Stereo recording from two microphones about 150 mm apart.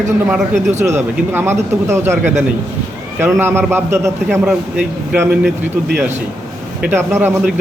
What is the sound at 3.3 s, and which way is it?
Speech, 15° right (ahead or behind).